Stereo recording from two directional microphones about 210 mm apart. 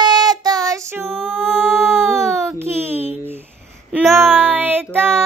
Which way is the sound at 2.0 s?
15° right (ahead or behind).